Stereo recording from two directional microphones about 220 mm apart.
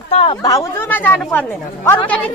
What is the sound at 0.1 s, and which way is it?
Speech, 25° left (ahead or behind).